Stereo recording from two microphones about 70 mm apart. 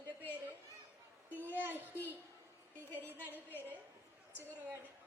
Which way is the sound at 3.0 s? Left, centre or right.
Right.